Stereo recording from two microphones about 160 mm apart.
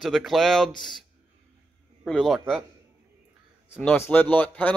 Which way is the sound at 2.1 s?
Centre (ahead or behind).